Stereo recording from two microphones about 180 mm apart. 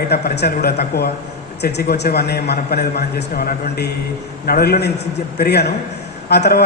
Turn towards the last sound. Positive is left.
turn(degrees=65)  # may be behind; listen again after turning